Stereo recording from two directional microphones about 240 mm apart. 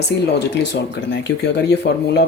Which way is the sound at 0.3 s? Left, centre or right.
Left.